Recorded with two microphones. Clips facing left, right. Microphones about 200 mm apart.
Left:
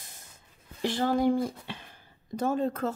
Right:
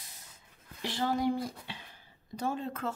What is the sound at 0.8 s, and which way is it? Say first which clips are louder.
A woman's voice: left 5 dB; 50° left (ahead or behind).